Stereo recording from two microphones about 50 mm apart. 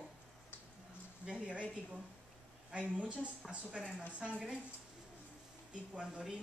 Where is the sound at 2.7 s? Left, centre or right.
Right.